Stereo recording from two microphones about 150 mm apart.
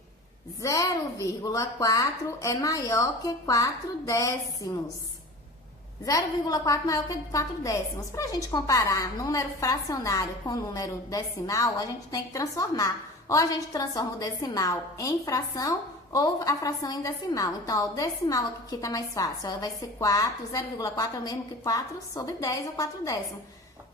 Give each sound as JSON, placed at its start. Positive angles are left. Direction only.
{"t": 0.6, "sound": "a woman's voice", "side_deg": 20}
{"t": 6.1, "sound": "a woman's voice", "side_deg": 25}